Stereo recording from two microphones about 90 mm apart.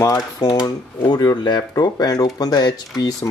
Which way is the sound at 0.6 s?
50° left (ahead or behind).